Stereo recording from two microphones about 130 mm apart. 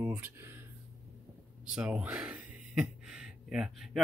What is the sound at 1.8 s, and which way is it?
Speech, 10° right (ahead or behind).